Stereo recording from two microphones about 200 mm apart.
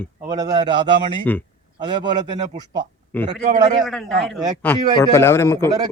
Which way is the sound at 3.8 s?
Centre (ahead or behind).